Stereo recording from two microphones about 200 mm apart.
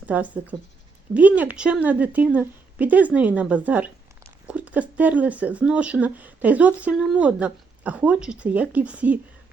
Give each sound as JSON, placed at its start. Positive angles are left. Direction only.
{"t": 0.0, "sound": "speech", "side_deg": -5}